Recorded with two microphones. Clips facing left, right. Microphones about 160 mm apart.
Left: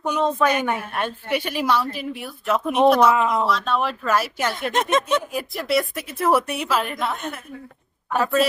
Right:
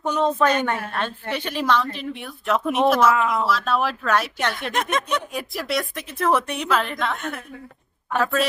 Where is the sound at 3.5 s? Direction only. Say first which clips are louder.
Even; centre (ahead or behind).